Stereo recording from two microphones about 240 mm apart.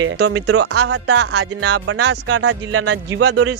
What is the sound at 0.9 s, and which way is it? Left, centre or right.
Speech, right.